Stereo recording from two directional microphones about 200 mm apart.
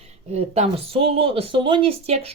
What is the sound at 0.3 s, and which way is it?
Speech, 30° right (ahead or behind).